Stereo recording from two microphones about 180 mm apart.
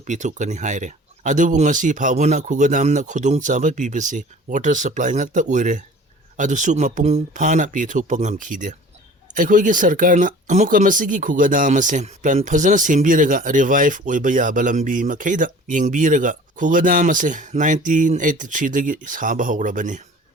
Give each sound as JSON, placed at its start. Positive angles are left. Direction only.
{"t": 0.0, "sound": "speech", "side_deg": -40}